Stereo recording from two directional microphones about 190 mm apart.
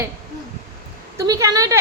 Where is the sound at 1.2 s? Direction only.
15° right (ahead or behind).